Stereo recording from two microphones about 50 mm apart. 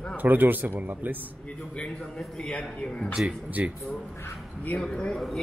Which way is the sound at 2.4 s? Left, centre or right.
Centre.